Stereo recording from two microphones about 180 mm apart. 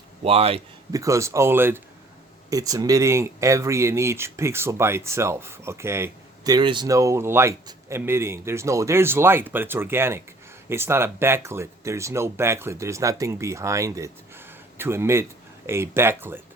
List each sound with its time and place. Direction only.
0.3 s speech: 35° right (ahead or behind)
0.9 s speech: 15° right (ahead or behind)